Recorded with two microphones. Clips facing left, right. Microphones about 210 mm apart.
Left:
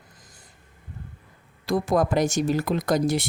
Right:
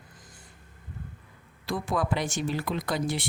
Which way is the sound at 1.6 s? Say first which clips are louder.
Left 7 dB; 40° left (ahead or behind).